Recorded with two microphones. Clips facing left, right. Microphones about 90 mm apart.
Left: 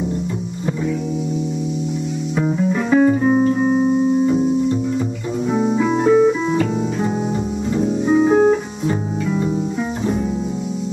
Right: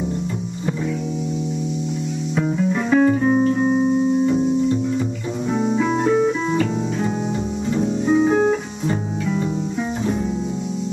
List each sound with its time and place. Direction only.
2.4 s music: 5° left (ahead or behind)
5.5 s music: 5° left (ahead or behind)